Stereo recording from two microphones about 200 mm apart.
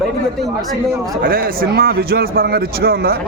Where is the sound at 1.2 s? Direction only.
45° right (ahead or behind).